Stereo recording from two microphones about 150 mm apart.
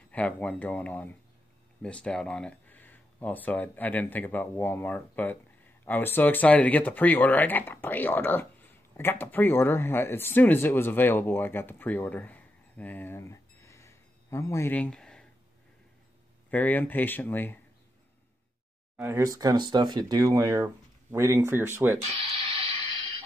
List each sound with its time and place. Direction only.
0.1 s speech: 10° left (ahead or behind)
16.4 s speech: 10° left (ahead or behind)
18.9 s speech: 15° right (ahead or behind)
22.1 s a sound: 40° right (ahead or behind)